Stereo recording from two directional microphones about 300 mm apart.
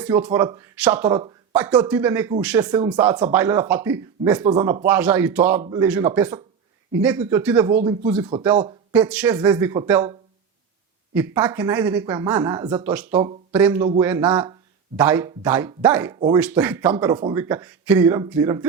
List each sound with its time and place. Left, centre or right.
0.0 s speech: centre
8.9 s speech: centre